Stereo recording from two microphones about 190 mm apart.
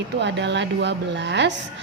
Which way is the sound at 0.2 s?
65° right (ahead or behind).